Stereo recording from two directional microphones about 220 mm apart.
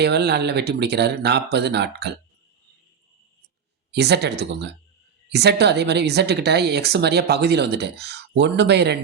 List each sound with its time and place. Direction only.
0.0 s speech: 50° right (ahead or behind)
3.9 s speech: 50° right (ahead or behind)